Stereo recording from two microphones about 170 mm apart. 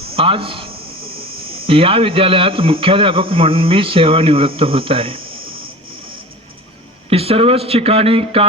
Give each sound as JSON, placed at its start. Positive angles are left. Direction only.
{"t": 0.2, "sound": "speech", "side_deg": -35}
{"t": 7.1, "sound": "speech", "side_deg": -35}